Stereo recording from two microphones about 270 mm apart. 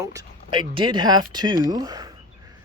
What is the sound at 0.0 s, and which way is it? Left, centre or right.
Speech, centre.